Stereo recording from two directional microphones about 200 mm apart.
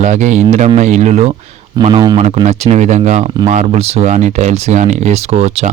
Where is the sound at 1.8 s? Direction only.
25° right (ahead or behind).